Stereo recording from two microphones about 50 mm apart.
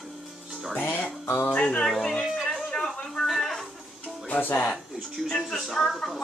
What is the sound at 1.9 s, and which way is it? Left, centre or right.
Speech, centre.